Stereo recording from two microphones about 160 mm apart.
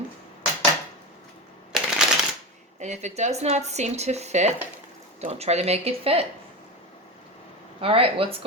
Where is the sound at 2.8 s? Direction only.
45° right (ahead or behind).